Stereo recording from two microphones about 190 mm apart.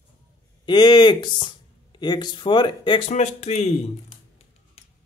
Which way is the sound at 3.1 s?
35° left (ahead or behind).